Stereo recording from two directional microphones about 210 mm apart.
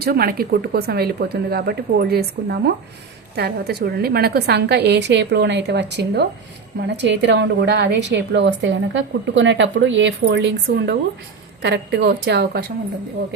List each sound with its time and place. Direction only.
0.0 s a woman's voice: 45° right (ahead or behind)